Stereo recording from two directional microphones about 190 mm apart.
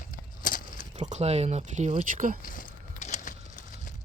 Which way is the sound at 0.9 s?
35° right (ahead or behind).